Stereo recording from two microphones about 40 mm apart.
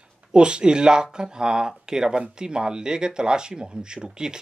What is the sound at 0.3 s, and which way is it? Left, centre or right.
Speech, right.